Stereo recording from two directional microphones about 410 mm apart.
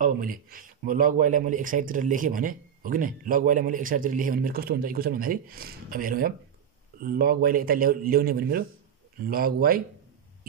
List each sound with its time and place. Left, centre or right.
0.0 s speech: right